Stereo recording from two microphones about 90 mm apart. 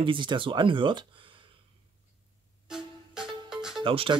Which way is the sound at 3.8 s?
75° right (ahead or behind).